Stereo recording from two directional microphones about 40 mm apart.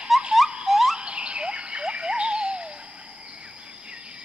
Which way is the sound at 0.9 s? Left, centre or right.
Right.